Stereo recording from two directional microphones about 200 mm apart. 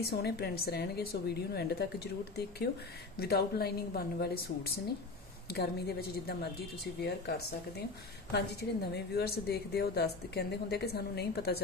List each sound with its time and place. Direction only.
0.1 s a woman's voice: 55° left (ahead or behind)